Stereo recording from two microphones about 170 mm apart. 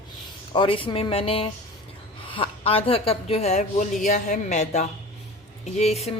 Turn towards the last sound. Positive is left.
turn(degrees=40)  # may be behind; listen again after turning